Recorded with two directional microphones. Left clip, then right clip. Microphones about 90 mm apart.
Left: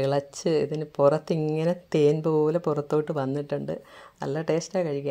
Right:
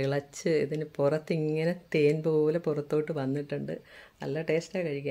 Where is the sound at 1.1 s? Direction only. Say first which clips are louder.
Left 3 dB; 30° left (ahead or behind).